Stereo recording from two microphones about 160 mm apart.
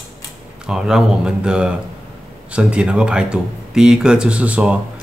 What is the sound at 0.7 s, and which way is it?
A man's voice, 5° right (ahead or behind).